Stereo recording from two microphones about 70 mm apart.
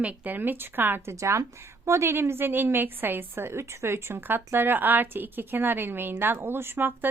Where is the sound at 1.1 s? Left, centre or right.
Right.